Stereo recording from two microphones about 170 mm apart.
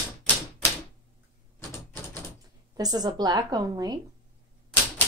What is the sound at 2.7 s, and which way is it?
A woman's voice, 25° right (ahead or behind).